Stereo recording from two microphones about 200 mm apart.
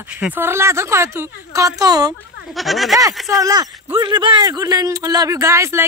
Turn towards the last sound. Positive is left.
turn(degrees=-15)  # may be behind; listen again after turning